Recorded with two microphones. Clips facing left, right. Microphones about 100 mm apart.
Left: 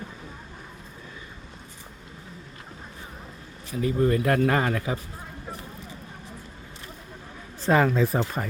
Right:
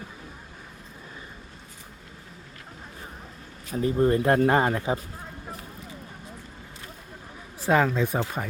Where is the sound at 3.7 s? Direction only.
35° right (ahead or behind).